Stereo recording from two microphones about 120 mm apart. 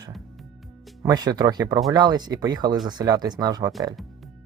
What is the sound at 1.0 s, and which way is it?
Speech, 35° right (ahead or behind).